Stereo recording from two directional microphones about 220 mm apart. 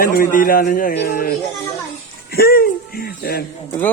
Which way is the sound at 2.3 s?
45° left (ahead or behind).